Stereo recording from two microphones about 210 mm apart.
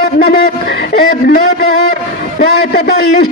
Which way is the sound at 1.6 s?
80° right.